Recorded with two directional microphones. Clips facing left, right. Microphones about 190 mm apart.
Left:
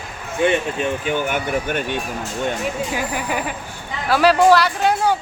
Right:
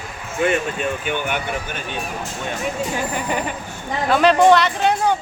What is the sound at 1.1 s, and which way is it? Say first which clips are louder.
Speech: left 3 dB; 45° left (ahead or behind).